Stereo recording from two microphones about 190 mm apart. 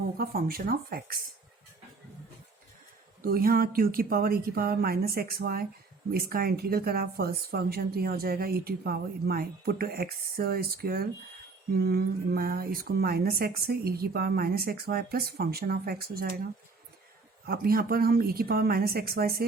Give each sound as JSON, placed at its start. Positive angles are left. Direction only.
{"t": 0.2, "sound": "a woman's voice", "side_deg": -50}
{"t": 3.2, "sound": "a woman's voice", "side_deg": -50}
{"t": 17.4, "sound": "a woman's voice", "side_deg": -55}